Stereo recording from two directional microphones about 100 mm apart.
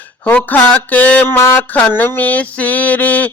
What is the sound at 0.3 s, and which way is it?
Mantra, 15° left (ahead or behind).